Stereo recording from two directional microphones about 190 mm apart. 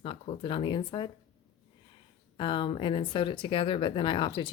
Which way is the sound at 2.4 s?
25° left (ahead or behind).